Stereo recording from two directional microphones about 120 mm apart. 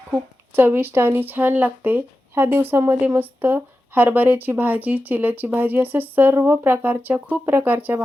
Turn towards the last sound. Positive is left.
turn(degrees=-15)  # may be behind; listen again after turning